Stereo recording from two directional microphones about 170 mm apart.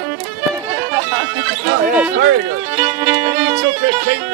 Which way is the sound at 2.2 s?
70° right (ahead or behind).